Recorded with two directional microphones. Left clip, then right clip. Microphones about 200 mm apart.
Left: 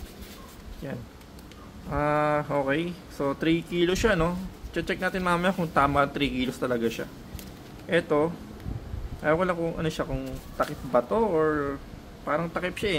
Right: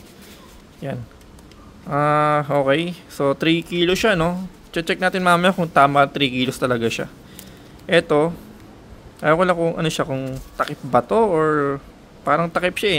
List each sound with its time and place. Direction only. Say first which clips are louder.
0.8 s a man's voice: right 8 dB; 45° right (ahead or behind)